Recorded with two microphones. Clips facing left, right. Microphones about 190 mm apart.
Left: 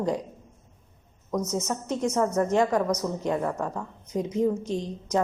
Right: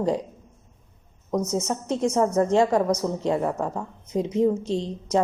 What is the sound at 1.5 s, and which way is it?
A woman's voice, 30° right (ahead or behind).